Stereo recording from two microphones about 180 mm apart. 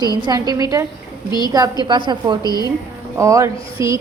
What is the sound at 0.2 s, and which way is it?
A woman's voice, 20° right (ahead or behind).